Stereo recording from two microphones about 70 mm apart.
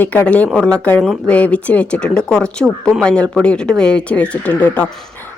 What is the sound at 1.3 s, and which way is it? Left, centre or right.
Speech, centre.